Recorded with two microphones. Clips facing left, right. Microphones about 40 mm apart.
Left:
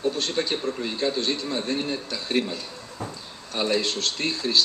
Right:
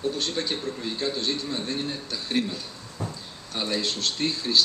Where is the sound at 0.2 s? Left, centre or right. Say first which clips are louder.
Left 3 dB; left.